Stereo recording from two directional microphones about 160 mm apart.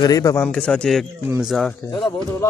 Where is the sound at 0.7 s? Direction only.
5° left (ahead or behind).